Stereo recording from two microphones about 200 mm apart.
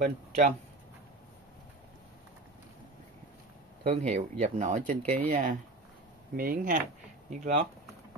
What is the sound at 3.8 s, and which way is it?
Speech, 35° right (ahead or behind).